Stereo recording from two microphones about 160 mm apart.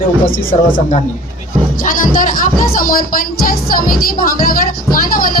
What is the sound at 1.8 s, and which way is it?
Speech, 60° left (ahead or behind).